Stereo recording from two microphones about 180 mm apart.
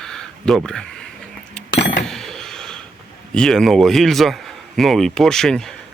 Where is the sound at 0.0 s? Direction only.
5° left (ahead or behind).